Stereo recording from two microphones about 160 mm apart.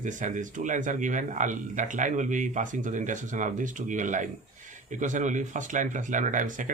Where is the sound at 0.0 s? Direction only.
50° right (ahead or behind).